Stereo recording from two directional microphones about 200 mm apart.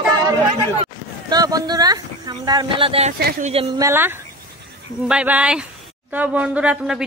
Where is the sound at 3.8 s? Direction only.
10° right (ahead or behind).